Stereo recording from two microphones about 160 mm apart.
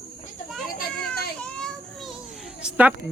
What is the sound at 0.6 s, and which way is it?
Children playing, 65° left (ahead or behind).